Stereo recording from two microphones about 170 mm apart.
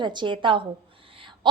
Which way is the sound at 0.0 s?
25° right (ahead or behind).